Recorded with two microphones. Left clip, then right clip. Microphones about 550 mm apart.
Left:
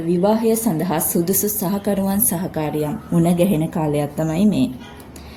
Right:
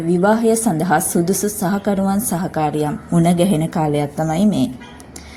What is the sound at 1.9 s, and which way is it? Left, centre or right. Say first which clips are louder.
A woman's voice: even; left.